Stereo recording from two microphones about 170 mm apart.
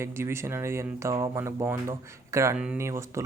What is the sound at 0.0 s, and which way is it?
Speech, 15° right (ahead or behind).